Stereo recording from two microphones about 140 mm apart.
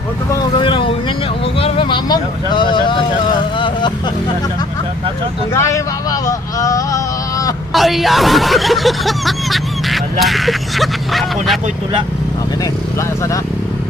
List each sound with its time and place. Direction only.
0.3 s vehicle: 35° left (ahead or behind)
5.5 s vehicle: 20° left (ahead or behind)
7.7 s speech: centre (ahead or behind)